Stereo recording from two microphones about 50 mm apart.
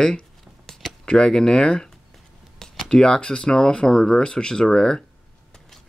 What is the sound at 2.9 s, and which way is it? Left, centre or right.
Speech, centre.